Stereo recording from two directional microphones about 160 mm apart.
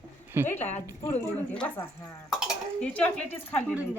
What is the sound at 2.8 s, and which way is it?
Speech, 10° left (ahead or behind).